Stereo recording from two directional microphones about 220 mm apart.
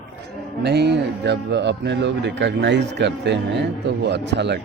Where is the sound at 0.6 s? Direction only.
50° right (ahead or behind).